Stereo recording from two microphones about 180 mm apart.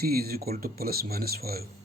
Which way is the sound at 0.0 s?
55° right (ahead or behind).